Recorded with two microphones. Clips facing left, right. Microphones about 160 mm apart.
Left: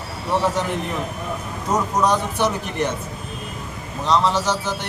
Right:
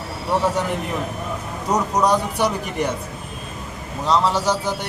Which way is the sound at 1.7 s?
15° right (ahead or behind).